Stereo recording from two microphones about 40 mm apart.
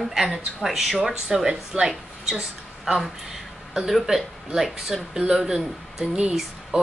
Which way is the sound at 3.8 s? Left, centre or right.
Centre.